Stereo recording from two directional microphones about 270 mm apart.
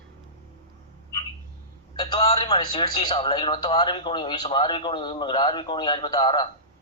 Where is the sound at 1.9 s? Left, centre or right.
Centre.